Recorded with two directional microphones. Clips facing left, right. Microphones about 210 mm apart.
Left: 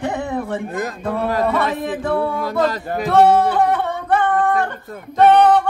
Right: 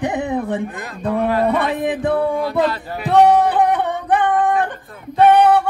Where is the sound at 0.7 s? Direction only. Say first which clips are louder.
Even; 40° left (ahead or behind).